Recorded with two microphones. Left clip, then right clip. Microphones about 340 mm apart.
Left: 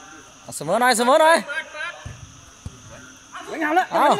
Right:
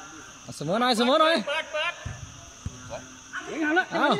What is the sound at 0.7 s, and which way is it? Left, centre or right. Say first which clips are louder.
Speech: left 6 dB; centre.